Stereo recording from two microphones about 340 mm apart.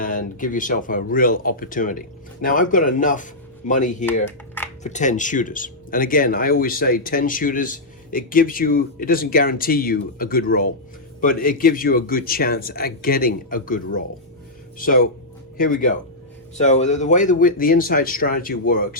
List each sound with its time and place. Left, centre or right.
0.0 s speech: left
4.3 s computer keyboard: centre
4.8 s speech: left